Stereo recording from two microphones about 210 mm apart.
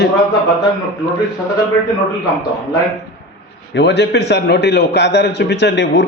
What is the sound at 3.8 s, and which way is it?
A man's voice, 55° left (ahead or behind).